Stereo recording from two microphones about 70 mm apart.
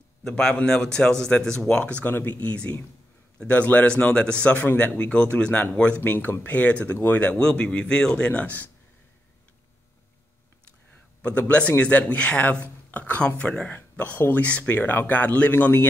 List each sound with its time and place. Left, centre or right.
0.4 s speech: centre
11.2 s speech: left